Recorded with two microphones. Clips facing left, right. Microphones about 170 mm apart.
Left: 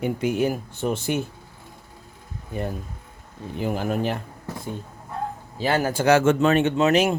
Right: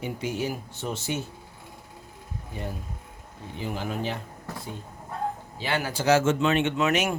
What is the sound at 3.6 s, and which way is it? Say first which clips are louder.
Speech: left 6 dB; 50° left (ahead or behind).